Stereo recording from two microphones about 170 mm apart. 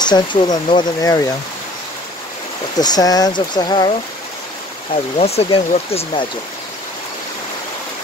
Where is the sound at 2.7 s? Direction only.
20° left (ahead or behind).